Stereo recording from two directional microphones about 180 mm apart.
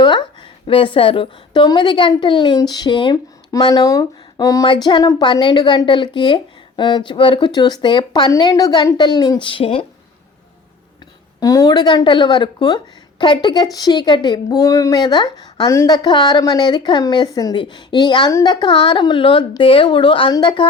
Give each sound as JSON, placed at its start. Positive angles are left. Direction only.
{"t": 0.0, "sound": "a woman's voice", "side_deg": 25}
{"t": 11.3, "sound": "a woman's voice", "side_deg": 20}